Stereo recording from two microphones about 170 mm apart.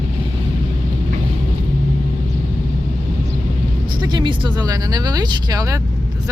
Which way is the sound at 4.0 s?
25° right (ahead or behind).